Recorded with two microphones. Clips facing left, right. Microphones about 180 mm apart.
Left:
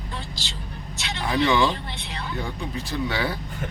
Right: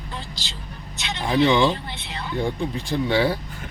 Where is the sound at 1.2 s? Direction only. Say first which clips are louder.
Right 3 dB; 25° right (ahead or behind).